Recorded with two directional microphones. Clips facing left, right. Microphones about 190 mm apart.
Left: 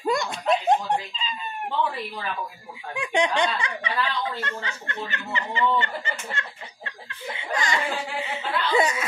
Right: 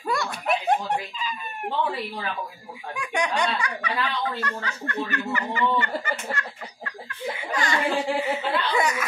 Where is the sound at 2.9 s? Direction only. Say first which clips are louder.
Left 3 dB; 25° left (ahead or behind).